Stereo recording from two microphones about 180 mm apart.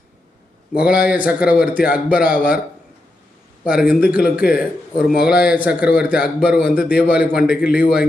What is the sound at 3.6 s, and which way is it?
A man's voice, 5° right (ahead or behind).